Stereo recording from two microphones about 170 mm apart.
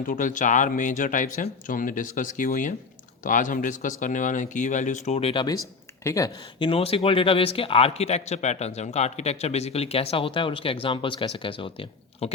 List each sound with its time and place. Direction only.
0.1 s speech: 50° left (ahead or behind); by 12.3 s 30° left (ahead or behind)